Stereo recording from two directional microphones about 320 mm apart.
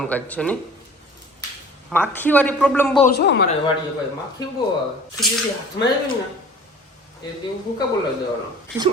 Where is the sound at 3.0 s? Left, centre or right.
Left.